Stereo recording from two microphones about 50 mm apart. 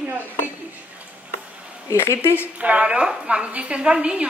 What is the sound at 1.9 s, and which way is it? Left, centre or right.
Speech, left.